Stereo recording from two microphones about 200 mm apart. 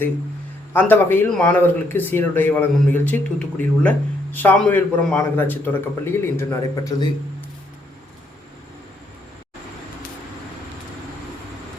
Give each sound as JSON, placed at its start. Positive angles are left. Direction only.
{"t": 0.7, "sound": "speech", "side_deg": 10}